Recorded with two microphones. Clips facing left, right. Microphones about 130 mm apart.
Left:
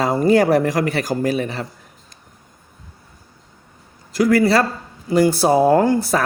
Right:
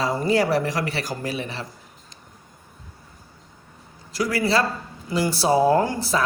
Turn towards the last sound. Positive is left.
turn(degrees=50)  # may be behind; listen again after turning